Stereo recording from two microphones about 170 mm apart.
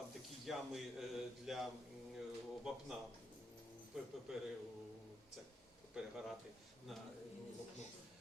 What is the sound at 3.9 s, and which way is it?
Speech, 5° right (ahead or behind).